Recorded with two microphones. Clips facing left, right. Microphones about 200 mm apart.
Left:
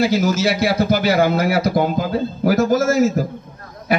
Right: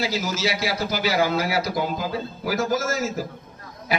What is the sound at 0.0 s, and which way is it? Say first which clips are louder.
A man's voice: left 9 dB; 55° left (ahead or behind).